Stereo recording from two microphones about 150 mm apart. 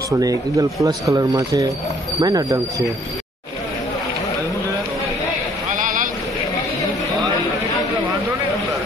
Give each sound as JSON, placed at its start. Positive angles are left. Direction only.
{"t": 0.2, "sound": "speech", "side_deg": -20}
{"t": 5.8, "sound": "boat", "side_deg": -60}